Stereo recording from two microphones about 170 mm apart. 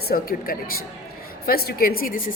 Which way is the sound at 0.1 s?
60° left (ahead or behind).